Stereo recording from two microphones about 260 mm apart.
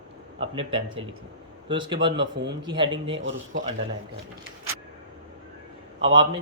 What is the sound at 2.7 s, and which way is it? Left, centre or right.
Speech, centre.